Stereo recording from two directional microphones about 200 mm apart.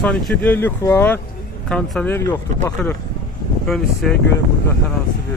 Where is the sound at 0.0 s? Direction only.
5° left (ahead or behind).